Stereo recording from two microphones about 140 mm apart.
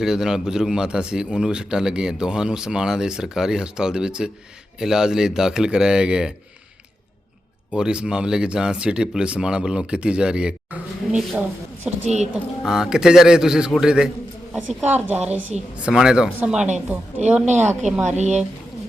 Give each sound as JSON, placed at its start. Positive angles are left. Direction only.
{"t": 0.0, "sound": "a man's voice", "side_deg": -5}
{"t": 7.7, "sound": "speech", "side_deg": -5}
{"t": 12.0, "sound": "a woman's voice", "side_deg": -55}
{"t": 12.3, "sound": "a man's voice", "side_deg": -5}
{"t": 17.4, "sound": "speech", "side_deg": -55}